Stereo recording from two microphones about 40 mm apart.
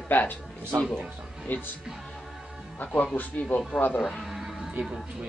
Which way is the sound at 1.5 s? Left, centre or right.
Left.